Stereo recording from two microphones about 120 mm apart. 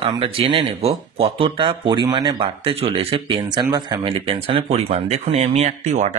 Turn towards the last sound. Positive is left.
turn(degrees=-75)  # may be behind; listen again after turning